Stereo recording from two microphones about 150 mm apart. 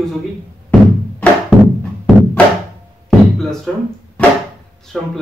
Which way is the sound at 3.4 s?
5° left (ahead or behind).